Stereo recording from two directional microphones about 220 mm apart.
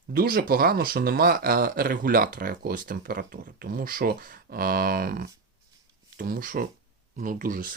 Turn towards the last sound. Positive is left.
turn(degrees=-40)  # may be behind; listen again after turning